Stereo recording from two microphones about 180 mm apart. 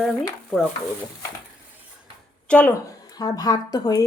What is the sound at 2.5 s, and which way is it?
Speech, 5° left (ahead or behind).